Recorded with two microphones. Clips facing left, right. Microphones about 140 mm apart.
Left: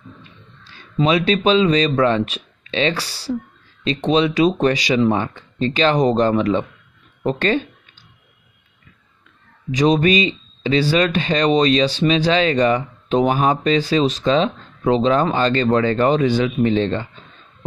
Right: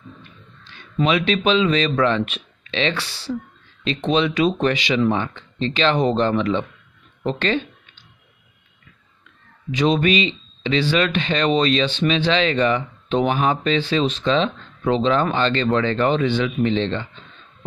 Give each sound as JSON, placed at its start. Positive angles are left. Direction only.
{"t": 1.0, "sound": "speech", "side_deg": 40}
{"t": 7.2, "sound": "a sound", "side_deg": 45}
{"t": 9.7, "sound": "speech", "side_deg": 40}